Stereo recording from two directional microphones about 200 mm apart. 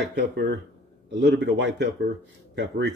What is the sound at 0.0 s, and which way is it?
A man's voice, 60° right (ahead or behind).